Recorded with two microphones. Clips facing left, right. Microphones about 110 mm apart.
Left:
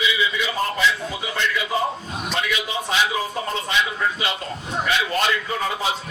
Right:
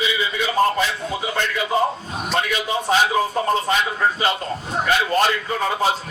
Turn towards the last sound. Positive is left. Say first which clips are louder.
# right 4 dB
turn(degrees=-45)  # may be behind; listen again after turning